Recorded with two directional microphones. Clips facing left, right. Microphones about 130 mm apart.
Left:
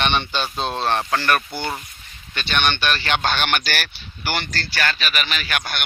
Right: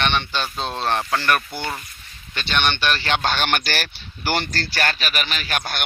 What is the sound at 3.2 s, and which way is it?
Speech, 35° right (ahead or behind).